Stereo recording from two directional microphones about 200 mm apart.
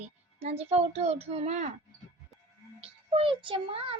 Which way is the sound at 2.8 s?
30° right (ahead or behind).